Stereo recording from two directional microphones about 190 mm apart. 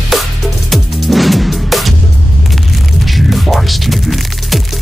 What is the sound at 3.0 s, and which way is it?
Music, centre (ahead or behind).